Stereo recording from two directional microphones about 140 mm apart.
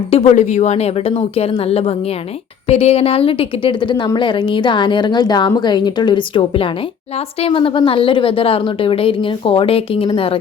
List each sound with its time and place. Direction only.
0.1 s a woman's voice: 45° left (ahead or behind)